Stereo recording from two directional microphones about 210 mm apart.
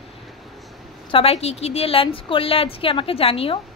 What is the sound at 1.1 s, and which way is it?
A woman's voice, 25° left (ahead or behind).